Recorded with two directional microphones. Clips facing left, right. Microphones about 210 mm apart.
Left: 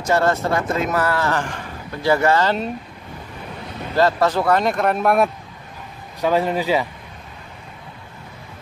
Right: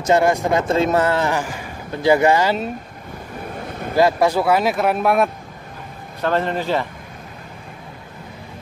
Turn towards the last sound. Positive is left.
turn(degrees=10)  # may be behind; listen again after turning